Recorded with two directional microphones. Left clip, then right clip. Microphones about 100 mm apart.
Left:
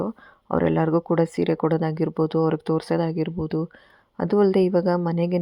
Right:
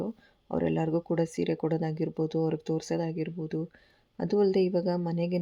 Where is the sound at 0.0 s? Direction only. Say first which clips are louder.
Left 7 dB; 30° left (ahead or behind).